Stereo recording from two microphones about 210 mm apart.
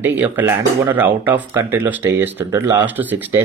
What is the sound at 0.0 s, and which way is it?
Speech, 10° right (ahead or behind).